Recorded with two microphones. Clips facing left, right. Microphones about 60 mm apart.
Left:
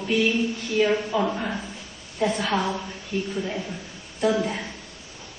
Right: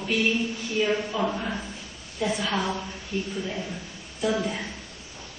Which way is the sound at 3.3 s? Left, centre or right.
Centre.